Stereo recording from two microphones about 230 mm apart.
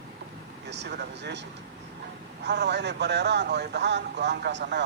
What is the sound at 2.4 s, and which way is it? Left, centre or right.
A man's voice, right.